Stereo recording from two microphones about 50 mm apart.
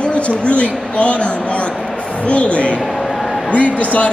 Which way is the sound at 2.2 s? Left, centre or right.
Left.